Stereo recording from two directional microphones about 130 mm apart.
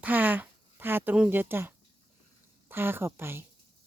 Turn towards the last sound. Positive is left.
turn(degrees=-15)  # may be behind; listen again after turning